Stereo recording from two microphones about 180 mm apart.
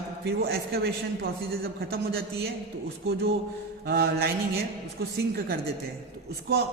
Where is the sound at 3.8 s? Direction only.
65° right (ahead or behind).